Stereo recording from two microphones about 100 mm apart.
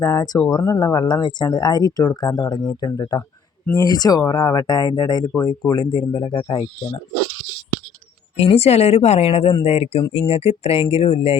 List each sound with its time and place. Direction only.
0.0 s speech: 35° left (ahead or behind); by 6.7 s 55° left (ahead or behind)
8.4 s a woman's voice: 90° left
10.1 s speech: 80° left